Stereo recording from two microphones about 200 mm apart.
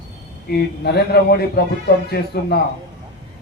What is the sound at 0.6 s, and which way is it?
Speech, 55° left (ahead or behind).